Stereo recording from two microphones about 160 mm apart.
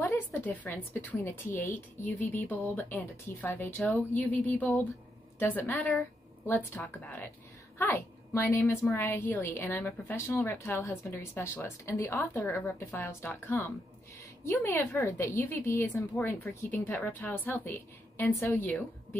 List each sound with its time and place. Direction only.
0.0 s a woman's voice: 15° left (ahead or behind)